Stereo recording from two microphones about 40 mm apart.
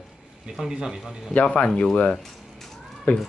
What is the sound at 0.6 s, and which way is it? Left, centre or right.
Speech, centre.